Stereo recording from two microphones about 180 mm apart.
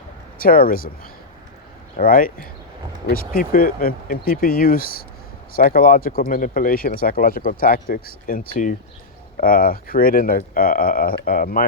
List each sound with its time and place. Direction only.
0.3 s speech: 55° left (ahead or behind)
2.0 s speech: 55° left (ahead or behind)